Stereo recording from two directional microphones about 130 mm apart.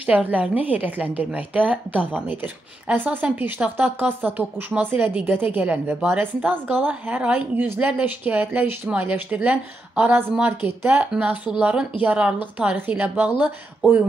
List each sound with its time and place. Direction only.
0.0 s a woman's voice: 10° right (ahead or behind)